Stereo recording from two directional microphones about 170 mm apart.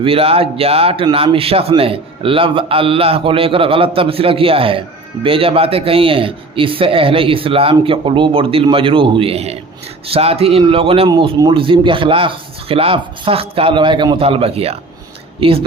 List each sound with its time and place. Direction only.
0.0 s a man's voice: 35° right (ahead or behind)